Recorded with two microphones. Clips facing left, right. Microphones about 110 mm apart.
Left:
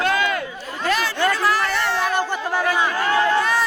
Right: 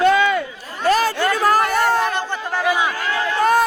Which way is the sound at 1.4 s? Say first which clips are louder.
Right 4 dB; 45° right (ahead or behind).